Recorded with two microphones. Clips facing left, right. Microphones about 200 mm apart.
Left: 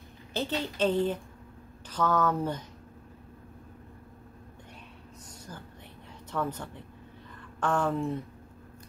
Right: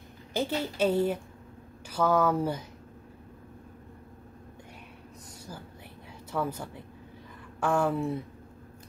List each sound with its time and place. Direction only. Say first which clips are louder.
0.3 s a woman's voice: right 2 dB; 10° right (ahead or behind)
5.5 s a woman's voice: right 2 dB; 10° right (ahead or behind)